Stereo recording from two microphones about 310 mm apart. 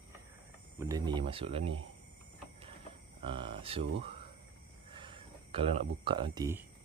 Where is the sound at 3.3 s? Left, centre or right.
Centre.